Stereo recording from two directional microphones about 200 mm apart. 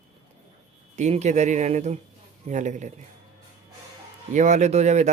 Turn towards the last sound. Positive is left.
turn(degrees=-35)  # may be behind; listen again after turning